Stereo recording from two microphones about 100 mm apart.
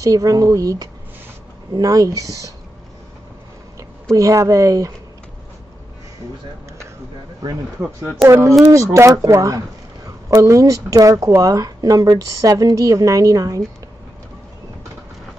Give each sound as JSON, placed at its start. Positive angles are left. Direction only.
{"t": 0.0, "sound": "speech", "side_deg": -35}
{"t": 3.7, "sound": "speech", "side_deg": -35}
{"t": 8.3, "sound": "speech", "side_deg": -30}